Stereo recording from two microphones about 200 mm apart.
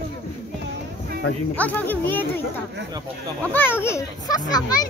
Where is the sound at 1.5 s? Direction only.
10° left (ahead or behind).